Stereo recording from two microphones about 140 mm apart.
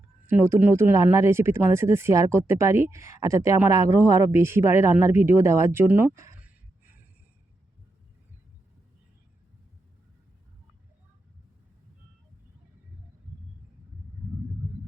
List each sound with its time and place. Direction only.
0.3 s speech: 15° right (ahead or behind)